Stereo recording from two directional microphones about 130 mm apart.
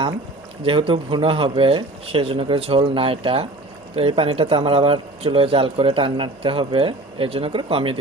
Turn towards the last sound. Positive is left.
turn(degrees=-45)  # may be behind; listen again after turning